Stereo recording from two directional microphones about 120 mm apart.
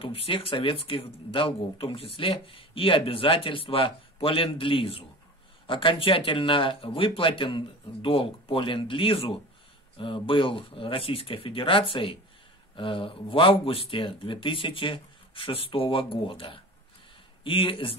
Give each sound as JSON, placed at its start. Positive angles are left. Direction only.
{"t": 0.0, "sound": "speech", "side_deg": 50}